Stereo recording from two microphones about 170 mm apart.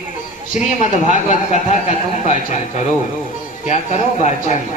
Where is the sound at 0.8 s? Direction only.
45° left (ahead or behind).